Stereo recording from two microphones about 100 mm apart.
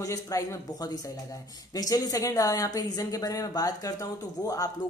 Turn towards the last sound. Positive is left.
turn(degrees=35)  # may be behind; listen again after turning